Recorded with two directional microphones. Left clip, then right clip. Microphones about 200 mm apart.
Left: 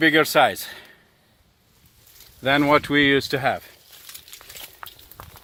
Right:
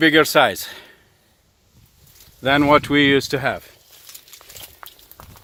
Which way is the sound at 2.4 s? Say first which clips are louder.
Right 3 dB; 45° right (ahead or behind).